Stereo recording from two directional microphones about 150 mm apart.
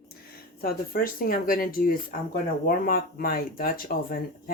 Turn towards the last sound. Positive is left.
turn(degrees=80)